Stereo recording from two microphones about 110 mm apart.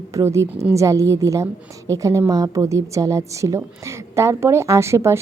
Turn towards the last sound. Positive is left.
turn(degrees=-25)  # may be behind; listen again after turning